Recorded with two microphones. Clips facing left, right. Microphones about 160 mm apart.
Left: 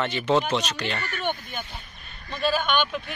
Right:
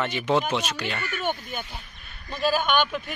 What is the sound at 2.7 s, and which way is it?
Speech, 45° right (ahead or behind).